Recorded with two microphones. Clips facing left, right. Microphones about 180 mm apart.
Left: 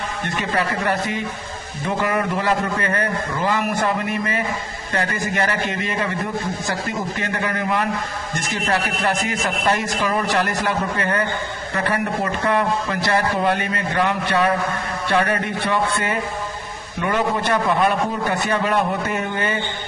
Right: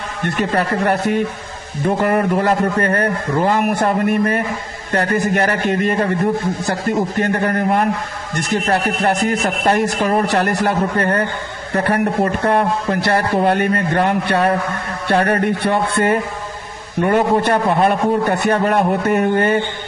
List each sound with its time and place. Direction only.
0.5 s a man's voice: 55° right (ahead or behind)
7.2 s a man's voice: 50° right (ahead or behind)
9.0 s a man's voice: 55° right (ahead or behind)
11.7 s a man's voice: 45° right (ahead or behind)
17.8 s a man's voice: 60° right (ahead or behind)